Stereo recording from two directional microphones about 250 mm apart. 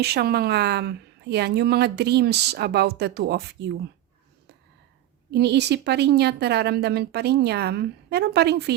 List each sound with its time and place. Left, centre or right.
0.0 s speech: right
5.3 s speech: right